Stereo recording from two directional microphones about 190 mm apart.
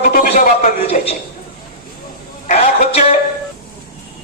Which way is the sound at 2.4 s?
40° left (ahead or behind).